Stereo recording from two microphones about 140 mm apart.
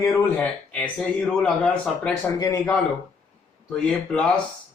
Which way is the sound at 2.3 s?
25° left (ahead or behind).